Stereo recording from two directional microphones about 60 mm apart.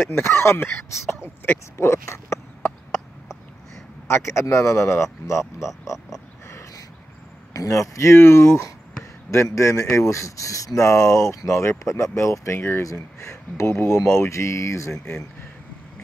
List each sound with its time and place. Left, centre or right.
0.1 s speech: left
1.8 s speech: left
4.1 s speech: left
7.5 s speech: left